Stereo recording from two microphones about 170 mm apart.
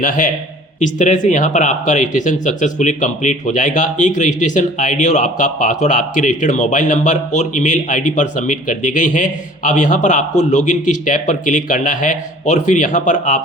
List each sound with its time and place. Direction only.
0.0 s speech: 50° left (ahead or behind)